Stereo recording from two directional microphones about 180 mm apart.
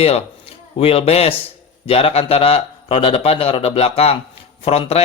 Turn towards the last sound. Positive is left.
turn(degrees=35)  # may be behind; listen again after turning